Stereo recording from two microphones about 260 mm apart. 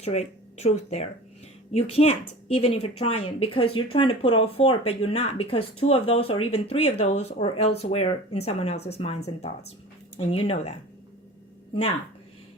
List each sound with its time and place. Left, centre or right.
0.0 s a woman's voice: left